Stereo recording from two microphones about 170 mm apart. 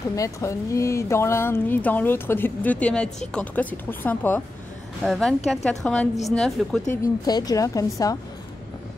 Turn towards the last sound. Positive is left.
turn(degrees=20)  # may be behind; listen again after turning